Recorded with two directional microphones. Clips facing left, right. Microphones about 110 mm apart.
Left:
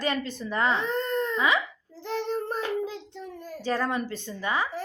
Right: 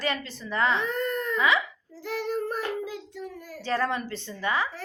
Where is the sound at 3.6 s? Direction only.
15° left (ahead or behind).